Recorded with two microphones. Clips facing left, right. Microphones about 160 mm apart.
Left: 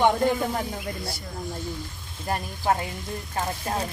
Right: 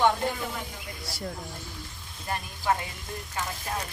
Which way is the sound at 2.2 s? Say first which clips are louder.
Left 3 dB; 35° left (ahead or behind).